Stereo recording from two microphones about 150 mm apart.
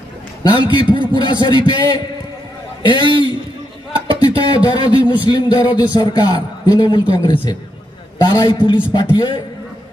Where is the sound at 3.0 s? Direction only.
35° right (ahead or behind).